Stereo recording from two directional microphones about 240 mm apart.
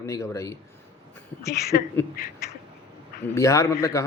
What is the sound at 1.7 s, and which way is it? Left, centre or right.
Speech, left.